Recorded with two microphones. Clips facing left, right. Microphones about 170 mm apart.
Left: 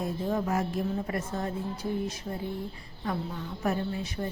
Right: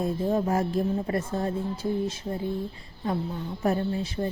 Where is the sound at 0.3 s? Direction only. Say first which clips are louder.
Right 3 dB; 30° right (ahead or behind).